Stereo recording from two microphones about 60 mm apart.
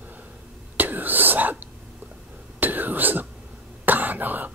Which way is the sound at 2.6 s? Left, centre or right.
Right.